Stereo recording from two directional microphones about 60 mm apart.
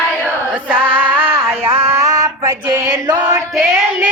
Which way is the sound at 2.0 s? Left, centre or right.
Right.